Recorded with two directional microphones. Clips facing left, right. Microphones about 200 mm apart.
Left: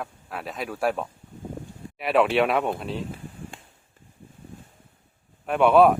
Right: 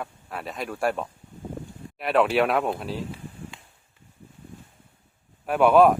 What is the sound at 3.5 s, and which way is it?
Chop, 50° left (ahead or behind).